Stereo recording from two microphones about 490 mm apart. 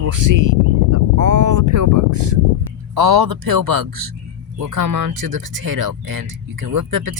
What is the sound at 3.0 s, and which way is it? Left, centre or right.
Speech, right.